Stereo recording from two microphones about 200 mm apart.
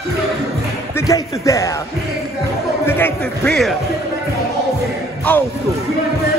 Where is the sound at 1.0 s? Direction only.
15° left (ahead or behind).